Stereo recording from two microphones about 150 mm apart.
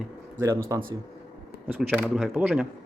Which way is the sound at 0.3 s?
20° right (ahead or behind).